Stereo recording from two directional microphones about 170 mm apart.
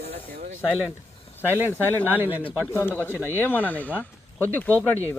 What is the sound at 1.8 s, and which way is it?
Speech, 10° left (ahead or behind).